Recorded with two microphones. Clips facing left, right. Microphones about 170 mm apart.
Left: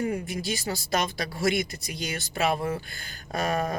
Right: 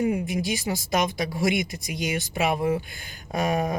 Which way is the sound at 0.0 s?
15° right (ahead or behind).